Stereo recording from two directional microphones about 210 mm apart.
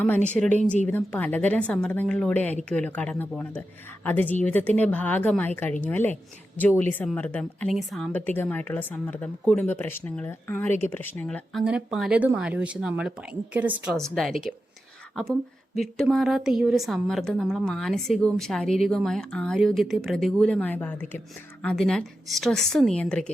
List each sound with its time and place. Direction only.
0.0 s a woman's voice: 5° left (ahead or behind)